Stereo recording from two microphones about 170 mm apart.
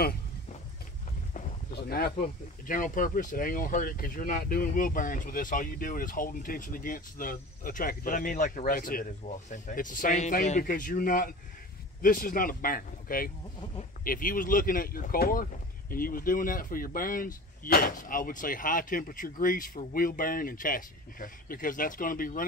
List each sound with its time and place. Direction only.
1.7 s speech: 65° left (ahead or behind)